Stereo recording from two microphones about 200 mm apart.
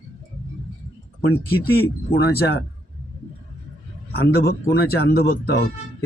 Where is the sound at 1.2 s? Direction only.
50° left (ahead or behind).